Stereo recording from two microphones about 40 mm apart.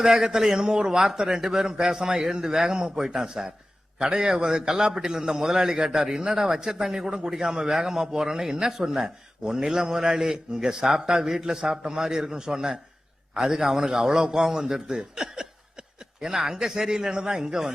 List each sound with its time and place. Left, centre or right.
0.0 s a man's voice: centre